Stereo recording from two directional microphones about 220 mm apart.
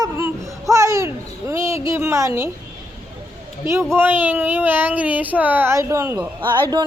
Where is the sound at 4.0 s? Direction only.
10° right (ahead or behind).